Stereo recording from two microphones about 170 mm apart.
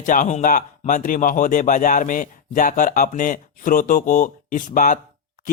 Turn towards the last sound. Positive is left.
turn(degrees=50)  # may be behind; listen again after turning